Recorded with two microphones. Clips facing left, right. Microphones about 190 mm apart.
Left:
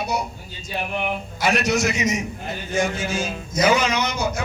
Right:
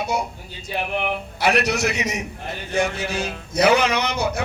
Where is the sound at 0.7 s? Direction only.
60° right (ahead or behind).